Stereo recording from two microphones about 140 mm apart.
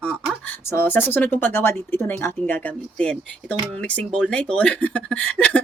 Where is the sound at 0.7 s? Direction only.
15° left (ahead or behind).